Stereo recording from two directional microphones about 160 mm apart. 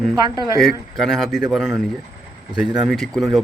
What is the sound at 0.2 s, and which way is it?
Speech, 25° right (ahead or behind).